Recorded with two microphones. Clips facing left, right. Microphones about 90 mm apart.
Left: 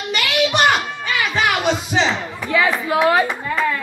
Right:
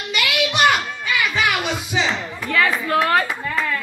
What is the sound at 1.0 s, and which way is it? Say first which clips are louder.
Music: left 1 dB; 35° left (ahead or behind).